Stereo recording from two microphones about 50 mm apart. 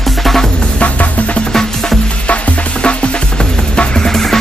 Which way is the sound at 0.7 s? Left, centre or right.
Left.